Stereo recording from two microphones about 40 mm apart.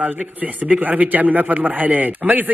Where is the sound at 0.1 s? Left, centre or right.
Right.